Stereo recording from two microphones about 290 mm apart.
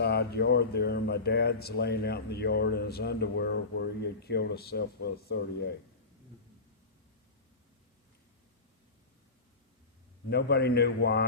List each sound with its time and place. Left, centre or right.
0.0 s speech: left
10.2 s speech: left